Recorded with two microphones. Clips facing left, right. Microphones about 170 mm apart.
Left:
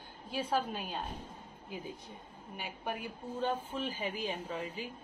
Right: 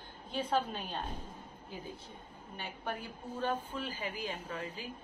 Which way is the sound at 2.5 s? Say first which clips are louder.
Left 1 dB; 10° left (ahead or behind).